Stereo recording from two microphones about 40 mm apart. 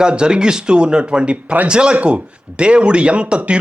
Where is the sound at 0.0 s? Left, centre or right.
Right.